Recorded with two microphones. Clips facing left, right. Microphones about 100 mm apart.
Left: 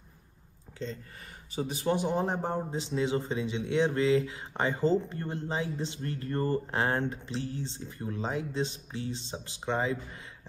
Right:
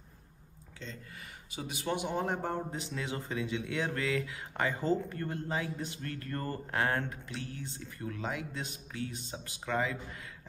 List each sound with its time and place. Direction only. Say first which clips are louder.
0.8 s speech: left 7 dB; 35° left (ahead or behind)